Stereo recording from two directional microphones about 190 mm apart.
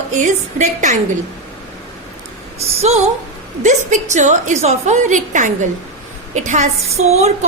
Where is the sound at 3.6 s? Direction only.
40° right (ahead or behind).